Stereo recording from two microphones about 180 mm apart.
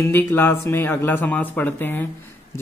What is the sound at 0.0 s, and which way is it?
Speech, 10° left (ahead or behind).